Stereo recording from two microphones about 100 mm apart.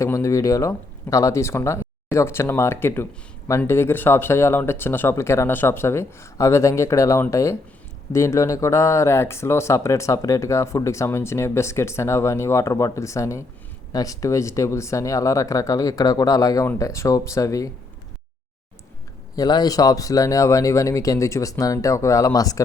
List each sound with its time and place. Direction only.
0.0 s speech: 30° left (ahead or behind)
19.4 s speech: 40° left (ahead or behind)